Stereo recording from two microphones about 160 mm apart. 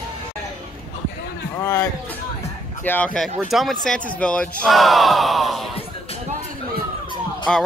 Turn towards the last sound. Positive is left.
turn(degrees=5)  # may be behind; listen again after turning